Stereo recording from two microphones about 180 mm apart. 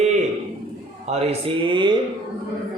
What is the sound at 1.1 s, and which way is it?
Speech, 35° right (ahead or behind).